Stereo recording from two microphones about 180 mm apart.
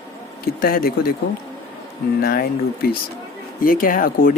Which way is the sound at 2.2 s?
55° left (ahead or behind).